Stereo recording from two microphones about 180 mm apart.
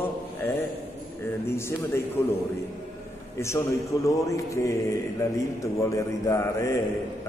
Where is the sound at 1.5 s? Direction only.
15° left (ahead or behind).